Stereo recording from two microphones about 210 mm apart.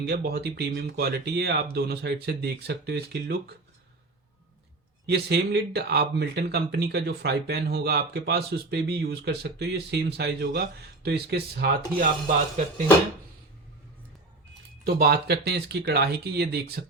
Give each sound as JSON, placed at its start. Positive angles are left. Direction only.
{"t": 0.0, "sound": "speech", "side_deg": -50}
{"t": 5.0, "sound": "speech", "side_deg": -50}
{"t": 14.8, "sound": "speech", "side_deg": -50}